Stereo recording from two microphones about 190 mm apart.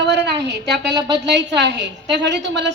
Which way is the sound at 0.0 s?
65° right (ahead or behind).